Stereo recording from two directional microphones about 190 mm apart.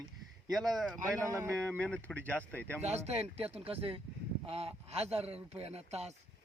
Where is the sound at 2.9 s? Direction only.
35° right (ahead or behind).